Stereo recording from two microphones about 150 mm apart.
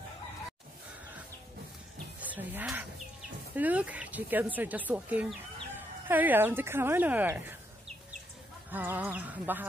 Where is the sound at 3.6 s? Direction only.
10° right (ahead or behind).